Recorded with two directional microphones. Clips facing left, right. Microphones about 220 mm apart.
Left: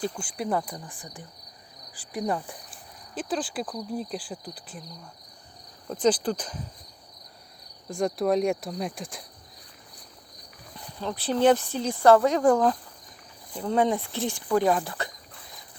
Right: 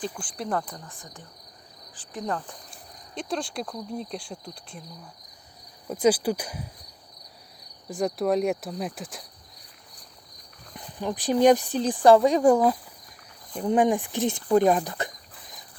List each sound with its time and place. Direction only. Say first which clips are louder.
0.0 s speech: left 2 dB; 5° left (ahead or behind)
5.9 s speech: right 2 dB; 10° right (ahead or behind)
7.9 s speech: even; centre (ahead or behind)
10.9 s speech: right 3 dB; 15° right (ahead or behind)